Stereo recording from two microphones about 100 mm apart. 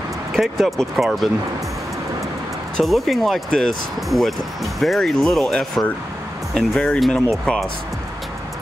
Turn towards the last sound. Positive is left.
turn(degrees=0)  # may be behind; listen again after turning